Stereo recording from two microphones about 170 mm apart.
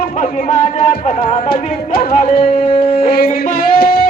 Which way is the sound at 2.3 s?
30° left (ahead or behind).